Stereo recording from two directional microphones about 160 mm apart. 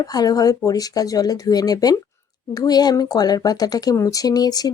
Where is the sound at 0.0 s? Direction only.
25° left (ahead or behind).